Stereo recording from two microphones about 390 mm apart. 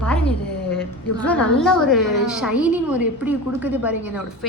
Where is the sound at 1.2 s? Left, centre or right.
Centre.